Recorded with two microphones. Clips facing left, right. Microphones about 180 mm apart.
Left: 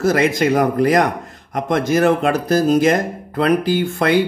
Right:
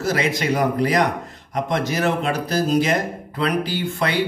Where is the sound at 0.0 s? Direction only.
50° left (ahead or behind).